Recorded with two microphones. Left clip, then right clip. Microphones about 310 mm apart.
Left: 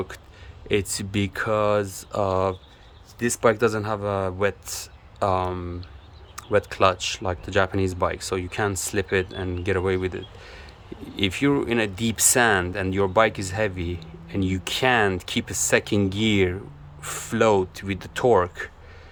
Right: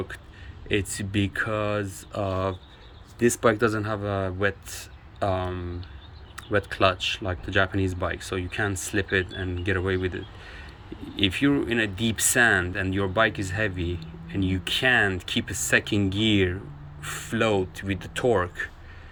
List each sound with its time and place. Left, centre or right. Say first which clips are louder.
0.7 s speech: left 3 dB; centre